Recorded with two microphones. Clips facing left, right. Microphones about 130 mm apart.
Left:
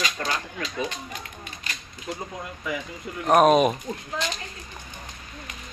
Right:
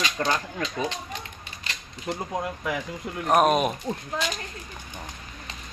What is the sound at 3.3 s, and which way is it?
Speech, centre (ahead or behind).